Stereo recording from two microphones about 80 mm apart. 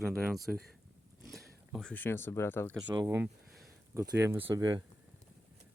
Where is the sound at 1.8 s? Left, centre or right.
Left.